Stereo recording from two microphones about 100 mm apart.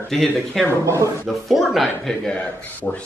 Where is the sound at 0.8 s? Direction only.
30° right (ahead or behind).